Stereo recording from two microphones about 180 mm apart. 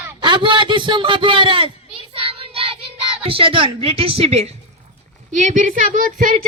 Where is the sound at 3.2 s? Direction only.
30° right (ahead or behind); by 6.3 s 50° right (ahead or behind).